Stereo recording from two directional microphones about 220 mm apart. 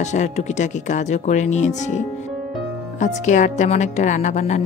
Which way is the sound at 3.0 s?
35° left (ahead or behind).